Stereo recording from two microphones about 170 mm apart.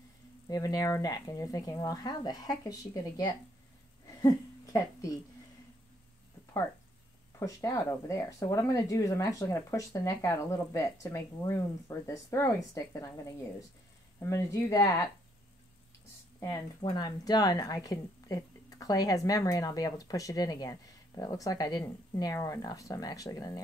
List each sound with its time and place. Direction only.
0.5 s a woman's voice: 20° left (ahead or behind)
7.3 s a woman's voice: 15° left (ahead or behind)
14.2 s a woman's voice: 20° left (ahead or behind)
16.8 s a woman's voice: 25° left (ahead or behind)